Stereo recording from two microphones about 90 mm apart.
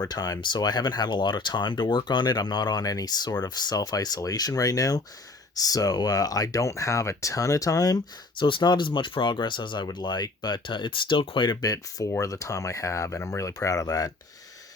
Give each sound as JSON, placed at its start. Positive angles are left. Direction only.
{"t": 0.1, "sound": "speech", "side_deg": 50}
{"t": 8.4, "sound": "speech", "side_deg": 65}
{"t": 11.6, "sound": "speech", "side_deg": 40}